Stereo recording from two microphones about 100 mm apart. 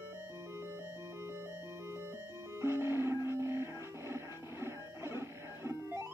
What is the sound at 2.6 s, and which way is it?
Music, 25° right (ahead or behind).